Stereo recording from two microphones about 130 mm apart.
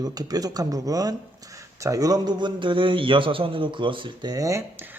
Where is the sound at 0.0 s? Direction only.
30° right (ahead or behind).